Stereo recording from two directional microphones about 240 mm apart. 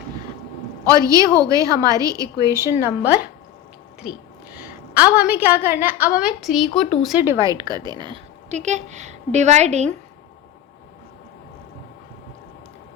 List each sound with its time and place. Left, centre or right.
0.9 s a woman's voice: centre
4.9 s a woman's voice: centre
5.8 s a woman's voice: left
6.1 s a woman's voice: centre; by 9.9 s right